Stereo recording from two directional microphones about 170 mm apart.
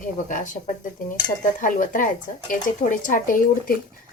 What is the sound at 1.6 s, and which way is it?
Speech, 50° left (ahead or behind).